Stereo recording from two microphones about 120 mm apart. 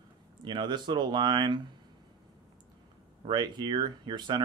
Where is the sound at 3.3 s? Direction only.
40° right (ahead or behind).